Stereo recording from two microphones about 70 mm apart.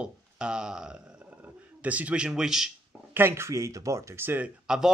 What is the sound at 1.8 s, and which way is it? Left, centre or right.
Speech, right.